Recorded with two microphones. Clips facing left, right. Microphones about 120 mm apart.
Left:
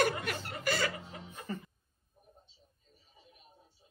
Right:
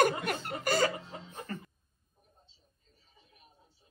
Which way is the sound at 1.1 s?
30° right (ahead or behind).